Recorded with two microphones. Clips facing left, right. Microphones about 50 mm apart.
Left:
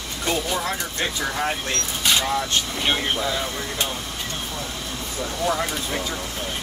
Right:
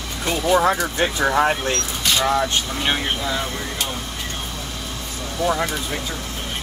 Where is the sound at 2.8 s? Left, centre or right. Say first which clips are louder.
Even; centre.